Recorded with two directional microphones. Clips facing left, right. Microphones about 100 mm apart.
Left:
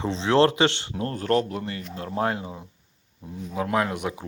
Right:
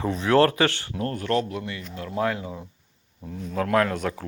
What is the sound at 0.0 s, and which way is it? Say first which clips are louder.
Speech: even; 25° left (ahead or behind).